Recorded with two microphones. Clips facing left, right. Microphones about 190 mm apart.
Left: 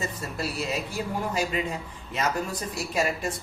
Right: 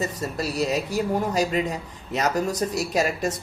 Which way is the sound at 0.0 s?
40° right (ahead or behind).